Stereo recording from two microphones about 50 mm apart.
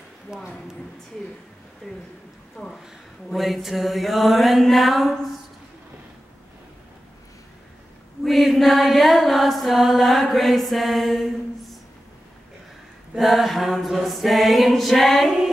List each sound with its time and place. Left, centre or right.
0.3 s speech: centre
1.8 s chant: centre
2.5 s speech: centre
3.3 s chant: centre
8.2 s chant: centre
13.2 s chant: centre